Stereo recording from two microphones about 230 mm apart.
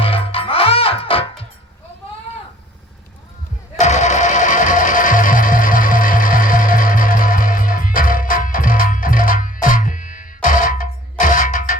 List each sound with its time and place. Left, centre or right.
0.0 s music: left
3.8 s music: left